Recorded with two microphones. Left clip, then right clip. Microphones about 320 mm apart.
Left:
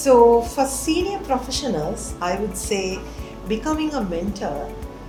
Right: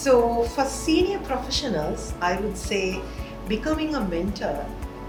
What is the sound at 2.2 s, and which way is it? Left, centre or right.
Music, left.